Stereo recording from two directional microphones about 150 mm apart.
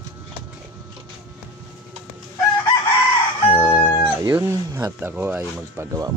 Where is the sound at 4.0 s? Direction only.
20° right (ahead or behind).